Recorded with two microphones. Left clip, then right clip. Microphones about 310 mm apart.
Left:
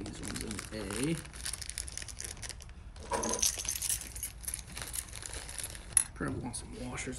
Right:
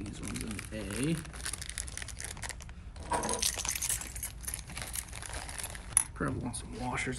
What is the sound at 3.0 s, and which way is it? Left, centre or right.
Keys jangling, right.